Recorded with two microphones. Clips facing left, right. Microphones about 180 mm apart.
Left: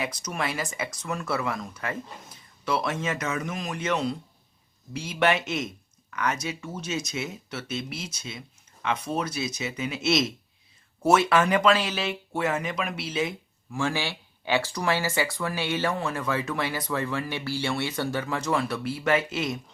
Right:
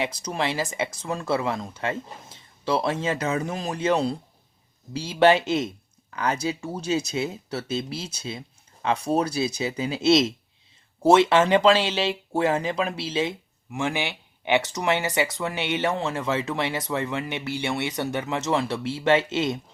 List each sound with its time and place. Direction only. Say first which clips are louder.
0.0 s speech: right 3 dB; 30° right (ahead or behind)